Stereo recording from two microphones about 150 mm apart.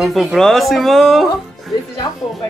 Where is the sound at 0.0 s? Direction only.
Centre (ahead or behind).